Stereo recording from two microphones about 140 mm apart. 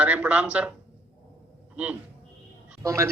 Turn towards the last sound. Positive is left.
turn(degrees=-20)  # may be behind; listen again after turning